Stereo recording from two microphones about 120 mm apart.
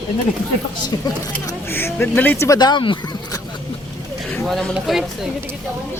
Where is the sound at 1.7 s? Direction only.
15° left (ahead or behind).